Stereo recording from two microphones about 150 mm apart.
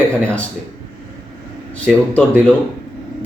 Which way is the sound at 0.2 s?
10° left (ahead or behind).